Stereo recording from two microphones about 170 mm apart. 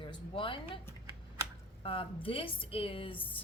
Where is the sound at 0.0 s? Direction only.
30° left (ahead or behind).